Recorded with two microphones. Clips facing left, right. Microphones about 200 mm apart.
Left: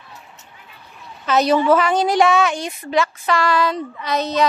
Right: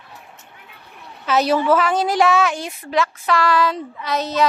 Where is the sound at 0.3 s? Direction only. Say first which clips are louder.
Even; 60° right (ahead or behind).